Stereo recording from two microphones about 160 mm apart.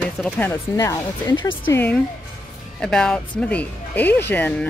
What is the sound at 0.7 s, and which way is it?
Speech, 25° left (ahead or behind).